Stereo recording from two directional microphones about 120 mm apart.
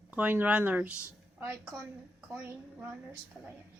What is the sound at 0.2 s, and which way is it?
Speech, 15° right (ahead or behind).